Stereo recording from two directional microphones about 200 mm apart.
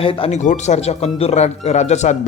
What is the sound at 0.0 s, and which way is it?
Speech, 25° left (ahead or behind).